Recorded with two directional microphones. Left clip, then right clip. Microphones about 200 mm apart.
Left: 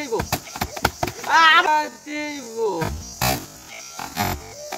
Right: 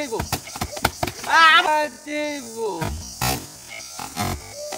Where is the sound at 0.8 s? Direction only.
5° right (ahead or behind).